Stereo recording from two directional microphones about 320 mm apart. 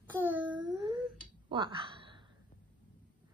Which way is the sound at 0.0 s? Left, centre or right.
Centre.